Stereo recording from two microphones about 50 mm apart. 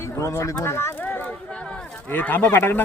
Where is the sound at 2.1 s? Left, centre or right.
Left.